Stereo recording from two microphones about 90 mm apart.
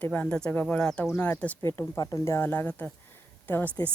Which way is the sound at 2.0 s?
35° left (ahead or behind).